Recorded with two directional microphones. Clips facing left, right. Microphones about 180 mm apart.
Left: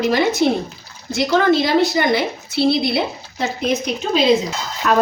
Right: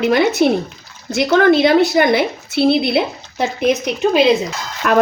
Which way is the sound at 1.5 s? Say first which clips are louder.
Right 4 dB; 55° right (ahead or behind).